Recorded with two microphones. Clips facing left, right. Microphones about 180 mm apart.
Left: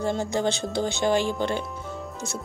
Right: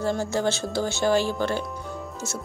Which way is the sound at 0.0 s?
20° left (ahead or behind).